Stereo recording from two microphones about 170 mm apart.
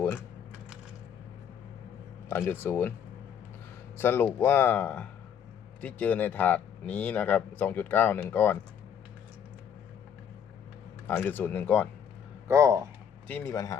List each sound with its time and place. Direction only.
2.3 s speech: 15° left (ahead or behind)
3.9 s speech: 10° left (ahead or behind)
11.0 s speech: 10° left (ahead or behind)
12.5 s speech: 20° right (ahead or behind)
13.2 s speech: 10° left (ahead or behind)